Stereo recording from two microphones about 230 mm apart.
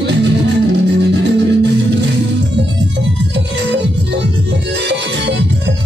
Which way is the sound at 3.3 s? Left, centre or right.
Right.